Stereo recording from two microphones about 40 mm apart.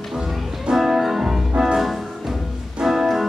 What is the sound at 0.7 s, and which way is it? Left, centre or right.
Music, centre.